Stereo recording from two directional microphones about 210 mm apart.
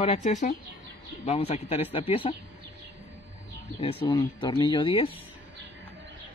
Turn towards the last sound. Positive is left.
turn(degrees=25)  # may be behind; listen again after turning